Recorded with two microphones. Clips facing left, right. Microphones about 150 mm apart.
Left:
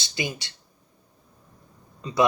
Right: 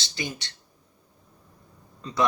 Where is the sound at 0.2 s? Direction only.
10° left (ahead or behind).